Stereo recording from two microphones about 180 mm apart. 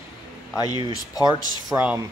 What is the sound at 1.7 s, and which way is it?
Speech, 10° right (ahead or behind).